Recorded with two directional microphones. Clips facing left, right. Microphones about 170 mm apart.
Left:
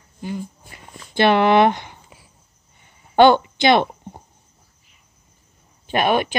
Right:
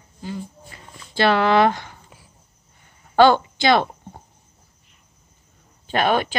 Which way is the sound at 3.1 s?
20° left (ahead or behind).